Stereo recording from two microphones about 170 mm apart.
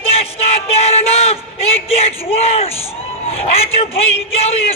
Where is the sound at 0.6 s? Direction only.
35° left (ahead or behind).